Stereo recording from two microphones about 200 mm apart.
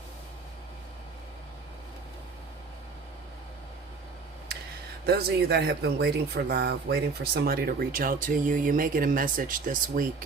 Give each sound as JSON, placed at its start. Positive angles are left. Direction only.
{"t": 5.0, "sound": "speech", "side_deg": -55}